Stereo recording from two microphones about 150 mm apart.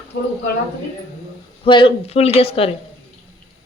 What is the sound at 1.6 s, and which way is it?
Speech, 35° left (ahead or behind).